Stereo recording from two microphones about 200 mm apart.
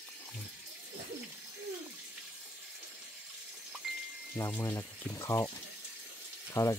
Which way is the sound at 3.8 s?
Centre (ahead or behind).